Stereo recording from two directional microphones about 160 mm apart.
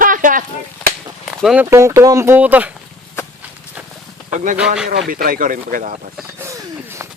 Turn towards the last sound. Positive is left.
turn(degrees=-15)  # may be behind; listen again after turning